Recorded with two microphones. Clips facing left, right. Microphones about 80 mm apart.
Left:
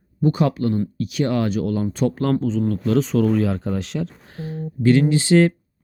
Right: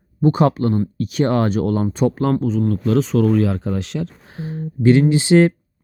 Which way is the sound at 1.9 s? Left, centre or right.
Right.